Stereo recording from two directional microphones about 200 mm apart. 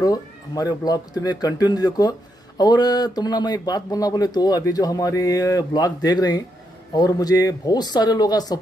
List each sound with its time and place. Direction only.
0.0 s speech: 20° left (ahead or behind)